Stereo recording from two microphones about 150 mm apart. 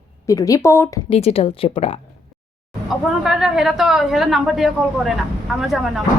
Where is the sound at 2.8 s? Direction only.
Centre (ahead or behind).